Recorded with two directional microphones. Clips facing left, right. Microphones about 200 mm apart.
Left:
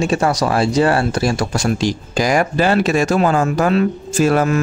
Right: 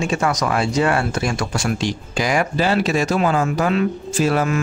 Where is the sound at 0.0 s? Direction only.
35° left (ahead or behind).